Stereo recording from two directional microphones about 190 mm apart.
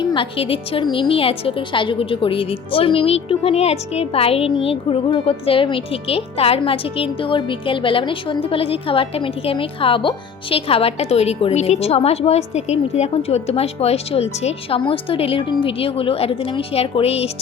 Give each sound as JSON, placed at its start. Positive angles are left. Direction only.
{"t": 0.0, "sound": "a woman's voice", "side_deg": 25}